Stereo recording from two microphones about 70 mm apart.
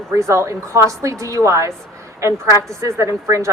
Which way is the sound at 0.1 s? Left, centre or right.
Right.